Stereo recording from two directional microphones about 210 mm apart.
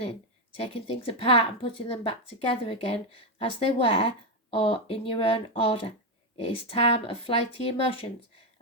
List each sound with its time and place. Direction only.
0.5 s speech: 30° left (ahead or behind)